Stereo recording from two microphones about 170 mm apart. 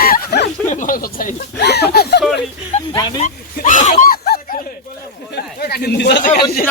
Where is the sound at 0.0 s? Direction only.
65° left (ahead or behind).